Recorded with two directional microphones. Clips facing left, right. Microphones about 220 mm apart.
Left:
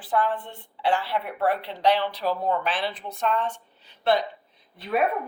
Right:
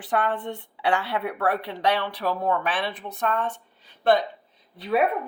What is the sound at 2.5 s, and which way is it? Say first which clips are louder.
Speech: right 1 dB; 65° right (ahead or behind).